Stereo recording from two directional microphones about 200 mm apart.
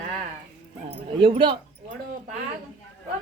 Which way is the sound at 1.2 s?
25° right (ahead or behind).